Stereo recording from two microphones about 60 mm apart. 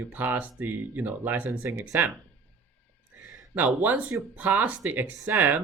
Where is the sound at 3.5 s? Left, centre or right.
Right.